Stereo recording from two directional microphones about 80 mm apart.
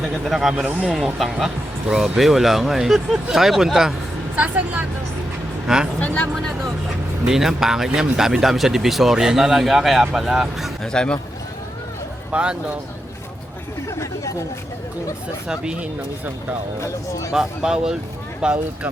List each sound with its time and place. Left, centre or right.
0.0 s speech: centre
0.5 s speech: centre
1.0 s speech: centre
4.4 s speech: centre
6.3 s speech: centre
7.3 s speech: centre
10.9 s a man's voice: centre
12.3 s speech: centre
15.4 s speech: centre
16.8 s speech: left
17.3 s speech: centre